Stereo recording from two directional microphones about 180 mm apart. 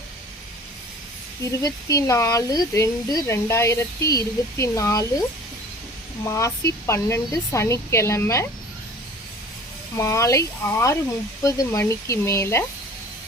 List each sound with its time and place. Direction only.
1.4 s speech: 20° left (ahead or behind)
6.2 s speech: 15° left (ahead or behind)
10.0 s speech: 15° left (ahead or behind)